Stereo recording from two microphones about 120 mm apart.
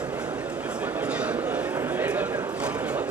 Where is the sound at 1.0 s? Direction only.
10° right (ahead or behind).